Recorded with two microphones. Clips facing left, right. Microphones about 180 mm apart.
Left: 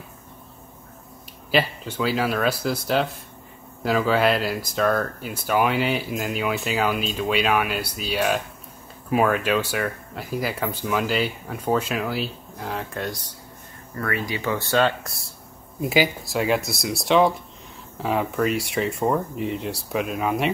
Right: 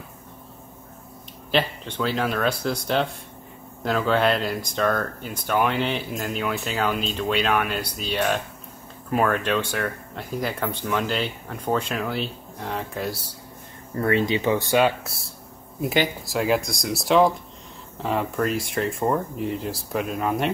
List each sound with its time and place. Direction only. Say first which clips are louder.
1.5 s speech: left 1 dB; 5° left (ahead or behind)
13.9 s speech: right 6 dB; 25° right (ahead or behind)
15.0 s speech: right 1 dB; centre (ahead or behind)